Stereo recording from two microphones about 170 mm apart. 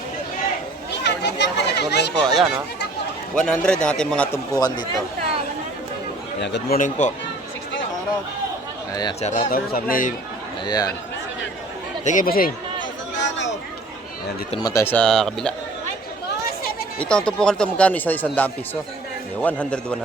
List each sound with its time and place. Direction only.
1.0 s a child's voice: 90° left
2.2 s speech: centre (ahead or behind)
4.6 s speech: 25° left (ahead or behind)
6.4 s a man's voice: 90° left
6.7 s speech: 45° left (ahead or behind)
8.9 s speech: 25° left (ahead or behind)
9.2 s speech: 50° left (ahead or behind)
10.7 s speech: 20° left (ahead or behind)
12.0 s speech: 55° left (ahead or behind)
13.1 s chatter: 90° left
14.6 s speech: 20° left (ahead or behind)
14.9 s speech: 5° left (ahead or behind)
17.0 s speech: 5° left (ahead or behind)